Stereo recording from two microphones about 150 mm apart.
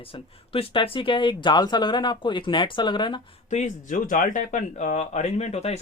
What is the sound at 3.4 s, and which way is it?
Speech, 55° left (ahead or behind).